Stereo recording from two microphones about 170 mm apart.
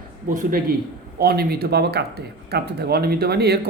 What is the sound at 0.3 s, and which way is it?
Speech, 50° right (ahead or behind).